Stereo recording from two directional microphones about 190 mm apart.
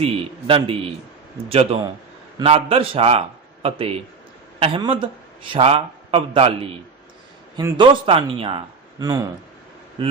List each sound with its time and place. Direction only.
0.0 s a man's voice: 30° right (ahead or behind)